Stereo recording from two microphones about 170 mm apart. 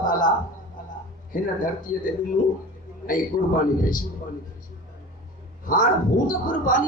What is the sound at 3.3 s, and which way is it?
Speech, 50° left (ahead or behind).